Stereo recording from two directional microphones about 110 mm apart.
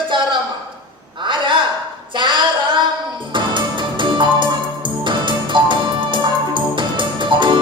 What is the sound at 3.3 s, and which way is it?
Music, 45° right (ahead or behind).